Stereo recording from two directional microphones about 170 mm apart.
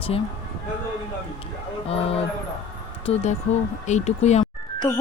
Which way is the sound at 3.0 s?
40° left (ahead or behind).